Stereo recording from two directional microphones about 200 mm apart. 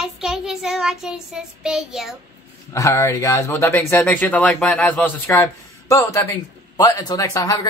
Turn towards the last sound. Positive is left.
turn(degrees=15)  # may be behind; listen again after turning